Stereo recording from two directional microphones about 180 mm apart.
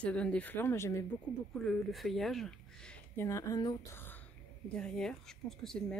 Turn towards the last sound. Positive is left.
turn(degrees=5)  # may be behind; listen again after turning